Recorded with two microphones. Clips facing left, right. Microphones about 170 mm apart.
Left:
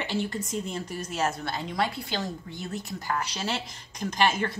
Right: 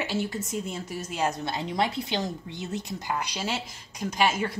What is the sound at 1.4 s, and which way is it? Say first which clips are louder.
A woman's voice: right 2 dB; 20° right (ahead or behind).